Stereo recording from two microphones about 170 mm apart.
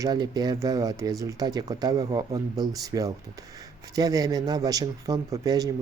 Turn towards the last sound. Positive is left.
turn(degrees=-20)  # may be behind; listen again after turning